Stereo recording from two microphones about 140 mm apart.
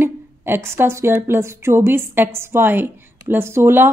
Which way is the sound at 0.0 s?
15° right (ahead or behind).